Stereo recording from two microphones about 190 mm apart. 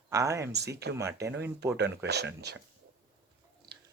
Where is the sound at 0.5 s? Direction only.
60° right (ahead or behind).